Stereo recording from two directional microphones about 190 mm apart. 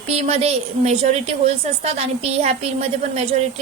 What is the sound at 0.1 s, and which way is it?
A woman's voice, 35° right (ahead or behind).